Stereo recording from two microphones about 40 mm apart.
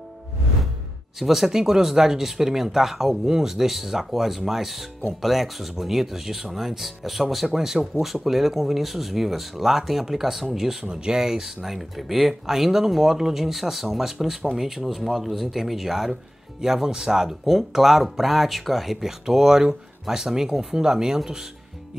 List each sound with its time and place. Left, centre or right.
1.2 s speech: centre
10.8 s speech: right